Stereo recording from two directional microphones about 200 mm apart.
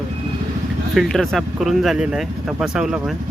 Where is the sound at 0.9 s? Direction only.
Centre (ahead or behind).